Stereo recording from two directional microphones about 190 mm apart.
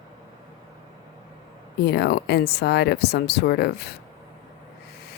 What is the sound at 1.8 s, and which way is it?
Speech, 60° left (ahead or behind).